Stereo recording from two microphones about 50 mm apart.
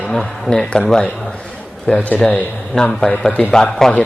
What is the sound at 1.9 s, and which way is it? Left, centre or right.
A man's voice, left.